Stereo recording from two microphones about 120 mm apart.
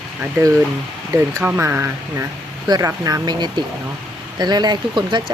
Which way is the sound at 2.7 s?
30° right (ahead or behind).